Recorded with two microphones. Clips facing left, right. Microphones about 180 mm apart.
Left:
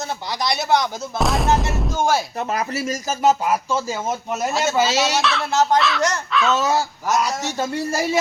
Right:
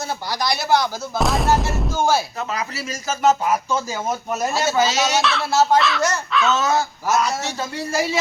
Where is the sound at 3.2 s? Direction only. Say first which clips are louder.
Even; 10° left (ahead or behind); by 7.4 s 5° right (ahead or behind).